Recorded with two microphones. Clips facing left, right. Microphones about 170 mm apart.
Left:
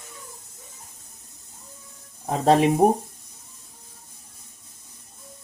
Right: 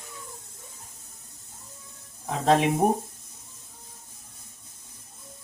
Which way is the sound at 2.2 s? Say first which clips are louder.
Left 3 dB; 35° left (ahead or behind).